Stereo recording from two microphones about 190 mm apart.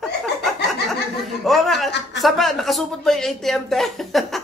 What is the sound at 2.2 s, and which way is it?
Speech, centre (ahead or behind).